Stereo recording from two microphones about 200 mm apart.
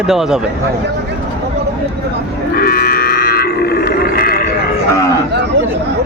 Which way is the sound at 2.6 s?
50° left (ahead or behind).